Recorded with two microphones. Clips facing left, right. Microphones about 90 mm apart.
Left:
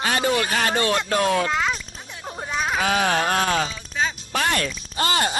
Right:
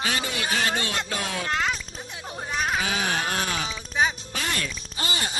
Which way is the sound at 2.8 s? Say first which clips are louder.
Left 6 dB; 60° left (ahead or behind).